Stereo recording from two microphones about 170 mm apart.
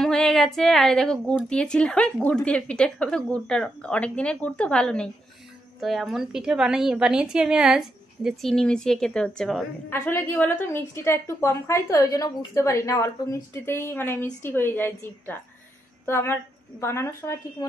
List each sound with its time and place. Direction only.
0.0 s a woman's voice: centre (ahead or behind)